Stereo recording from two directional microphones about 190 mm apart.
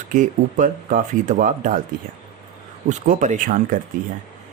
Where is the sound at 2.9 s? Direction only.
40° right (ahead or behind).